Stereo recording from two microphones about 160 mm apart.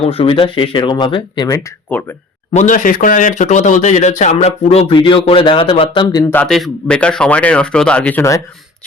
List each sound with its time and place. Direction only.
0.0 s speech: 35° left (ahead or behind)
1.5 s speech: 15° left (ahead or behind)
2.6 s speech: 55° left (ahead or behind); by 6.2 s 25° left (ahead or behind)
6.3 s a man's voice: 5° left (ahead or behind)